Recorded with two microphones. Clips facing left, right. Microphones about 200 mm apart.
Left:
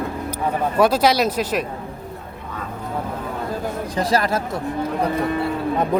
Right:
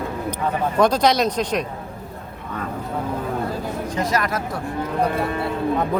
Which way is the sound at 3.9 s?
30° left (ahead or behind).